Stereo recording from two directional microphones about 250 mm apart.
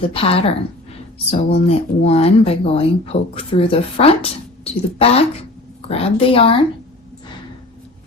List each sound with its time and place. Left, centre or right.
0.0 s speech: left